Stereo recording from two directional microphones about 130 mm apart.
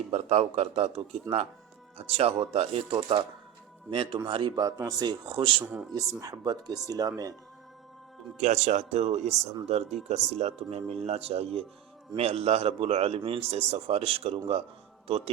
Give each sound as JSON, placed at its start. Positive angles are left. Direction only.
{"t": 0.1, "sound": "a man's voice", "side_deg": -55}
{"t": 4.5, "sound": "a man's voice", "side_deg": -25}
{"t": 5.9, "sound": "speech", "side_deg": -25}
{"t": 8.4, "sound": "a man's voice", "side_deg": -60}